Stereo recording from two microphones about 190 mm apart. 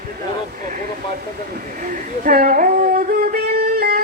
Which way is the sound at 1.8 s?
45° right (ahead or behind).